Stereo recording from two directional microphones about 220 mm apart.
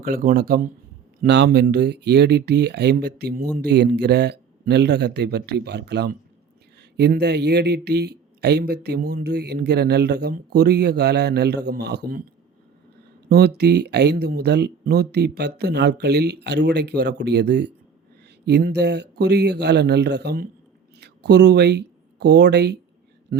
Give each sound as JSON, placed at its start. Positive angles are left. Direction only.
{"t": 0.0, "sound": "a man's voice", "side_deg": -40}
{"t": 13.2, "sound": "speech", "side_deg": -50}
{"t": 23.3, "sound": "a sound", "side_deg": -45}